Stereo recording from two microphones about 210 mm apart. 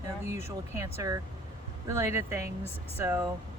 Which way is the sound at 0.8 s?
15° right (ahead or behind).